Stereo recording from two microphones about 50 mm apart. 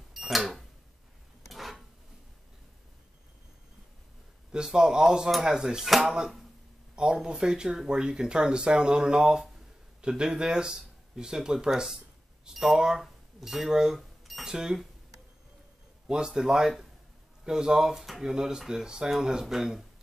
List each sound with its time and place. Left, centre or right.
0.1 s cash register: centre
1.5 s a sound: centre
4.5 s speech: centre
7.0 s speech: centre
16.1 s speech: centre